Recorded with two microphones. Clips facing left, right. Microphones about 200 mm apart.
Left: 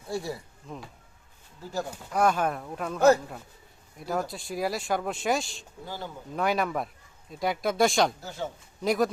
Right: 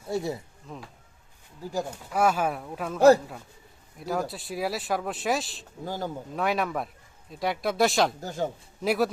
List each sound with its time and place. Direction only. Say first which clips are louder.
0.1 s speech: right 3 dB; 20° right (ahead or behind)
0.7 s speech: left 1 dB; centre (ahead or behind)
1.6 s speech: right 2 dB; 15° right (ahead or behind)
4.0 s speech: right 1 dB; centre (ahead or behind)
8.2 s speech: right 5 dB; 45° right (ahead or behind)
8.8 s speech: even; 5° right (ahead or behind)